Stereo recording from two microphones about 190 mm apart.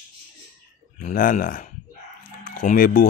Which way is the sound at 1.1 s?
45° left (ahead or behind).